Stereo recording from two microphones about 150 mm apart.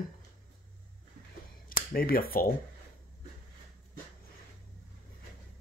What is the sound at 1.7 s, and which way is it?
Speech, 75° left (ahead or behind).